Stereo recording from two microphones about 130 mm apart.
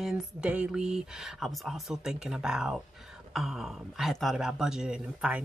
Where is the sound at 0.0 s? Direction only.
5° right (ahead or behind).